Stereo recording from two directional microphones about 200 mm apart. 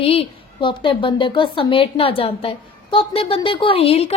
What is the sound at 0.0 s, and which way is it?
A woman's voice, 30° left (ahead or behind).